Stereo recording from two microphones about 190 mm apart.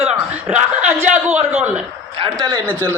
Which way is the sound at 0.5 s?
5° right (ahead or behind).